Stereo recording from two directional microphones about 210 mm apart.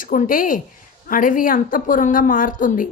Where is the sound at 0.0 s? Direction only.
40° left (ahead or behind).